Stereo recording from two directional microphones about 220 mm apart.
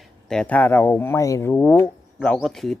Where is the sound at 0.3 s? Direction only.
5° left (ahead or behind).